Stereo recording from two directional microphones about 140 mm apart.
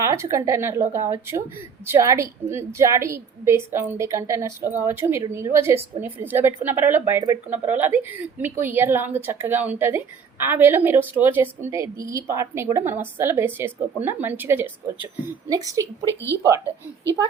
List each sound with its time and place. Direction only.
0.0 s a woman's voice: 20° right (ahead or behind)
16.0 s speech: 15° left (ahead or behind)